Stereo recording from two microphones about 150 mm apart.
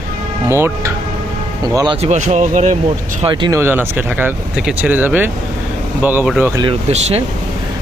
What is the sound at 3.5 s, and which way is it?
Speech, 15° right (ahead or behind).